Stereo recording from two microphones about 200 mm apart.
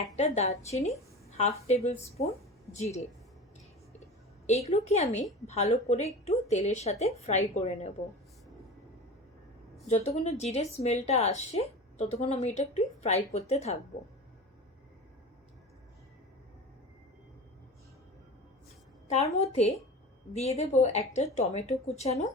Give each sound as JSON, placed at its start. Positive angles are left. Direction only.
{"t": 0.2, "sound": "a woman's voice", "side_deg": 35}
{"t": 4.4, "sound": "a woman's voice", "side_deg": 35}
{"t": 9.8, "sound": "a woman's voice", "side_deg": 30}
{"t": 19.0, "sound": "a woman's voice", "side_deg": 35}